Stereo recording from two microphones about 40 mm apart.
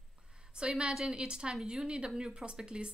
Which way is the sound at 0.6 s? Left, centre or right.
Right.